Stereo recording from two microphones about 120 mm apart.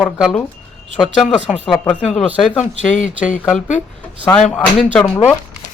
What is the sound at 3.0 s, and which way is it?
Speech, 90° left.